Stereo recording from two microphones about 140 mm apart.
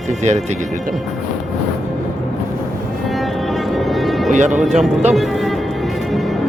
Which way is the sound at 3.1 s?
Centre (ahead or behind).